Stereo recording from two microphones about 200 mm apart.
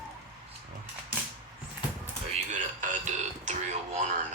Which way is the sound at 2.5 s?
35° right (ahead or behind).